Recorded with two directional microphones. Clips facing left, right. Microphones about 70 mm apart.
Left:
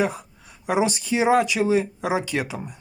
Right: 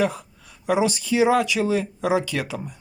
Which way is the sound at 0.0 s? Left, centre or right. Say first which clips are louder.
Right 1 dB; left.